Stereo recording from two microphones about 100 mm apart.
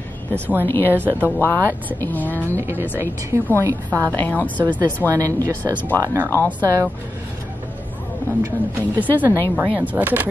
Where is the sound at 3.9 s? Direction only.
15° left (ahead or behind).